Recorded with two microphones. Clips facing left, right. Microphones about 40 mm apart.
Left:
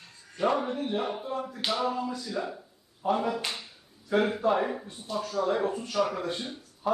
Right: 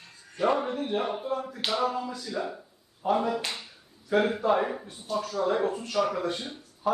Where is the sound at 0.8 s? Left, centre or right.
Centre.